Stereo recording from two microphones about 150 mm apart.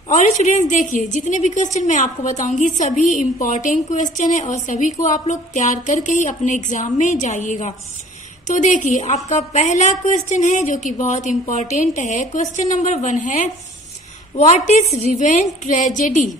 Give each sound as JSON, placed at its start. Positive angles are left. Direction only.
{"t": 0.1, "sound": "a woman's voice", "side_deg": 50}